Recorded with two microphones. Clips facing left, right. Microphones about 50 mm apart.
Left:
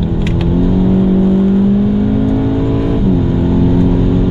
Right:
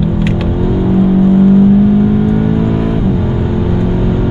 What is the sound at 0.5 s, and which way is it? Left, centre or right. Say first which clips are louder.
Vehicle: left 3 dB; centre.